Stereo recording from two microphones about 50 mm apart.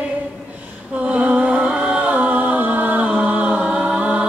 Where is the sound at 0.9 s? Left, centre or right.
Right.